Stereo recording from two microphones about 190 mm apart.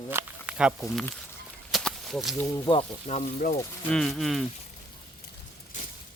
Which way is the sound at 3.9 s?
Centre (ahead or behind).